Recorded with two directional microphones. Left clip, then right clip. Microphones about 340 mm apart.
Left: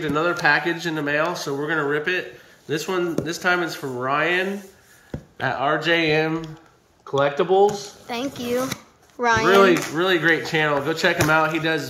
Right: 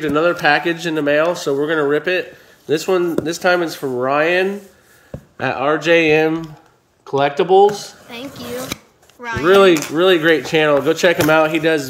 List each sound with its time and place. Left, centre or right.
0.0 s speech: right
8.1 s speech: centre
9.5 s speech: right